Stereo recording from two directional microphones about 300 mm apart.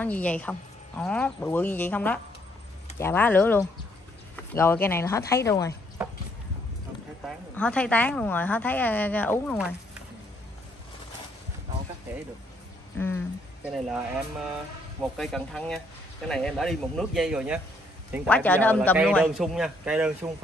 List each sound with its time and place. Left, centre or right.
0.0 s a woman's voice: centre
7.2 s a woman's voice: centre
12.9 s speech: centre
15.1 s a woman's voice: centre